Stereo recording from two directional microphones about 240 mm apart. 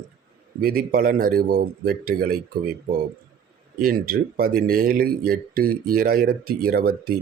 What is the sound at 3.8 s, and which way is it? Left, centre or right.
Speech, right.